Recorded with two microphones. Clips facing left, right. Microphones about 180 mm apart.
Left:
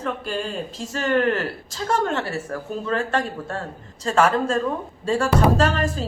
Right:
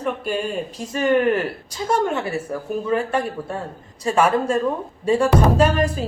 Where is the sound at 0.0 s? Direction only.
15° right (ahead or behind).